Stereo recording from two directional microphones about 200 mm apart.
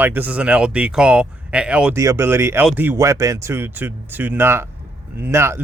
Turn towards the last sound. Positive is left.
turn(degrees=-10)  # may be behind; listen again after turning